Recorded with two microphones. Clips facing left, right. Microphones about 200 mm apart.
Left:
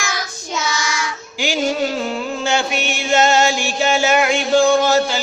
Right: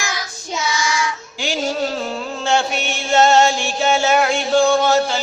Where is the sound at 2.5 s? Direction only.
Centre (ahead or behind).